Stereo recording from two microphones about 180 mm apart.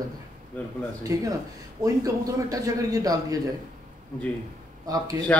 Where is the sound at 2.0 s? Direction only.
20° right (ahead or behind).